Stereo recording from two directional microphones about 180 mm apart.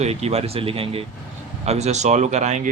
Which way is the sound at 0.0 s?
35° right (ahead or behind).